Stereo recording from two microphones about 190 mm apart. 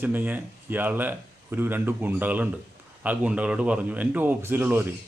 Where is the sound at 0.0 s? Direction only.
10° right (ahead or behind).